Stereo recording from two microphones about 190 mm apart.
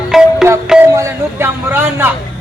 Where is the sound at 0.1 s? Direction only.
Centre (ahead or behind).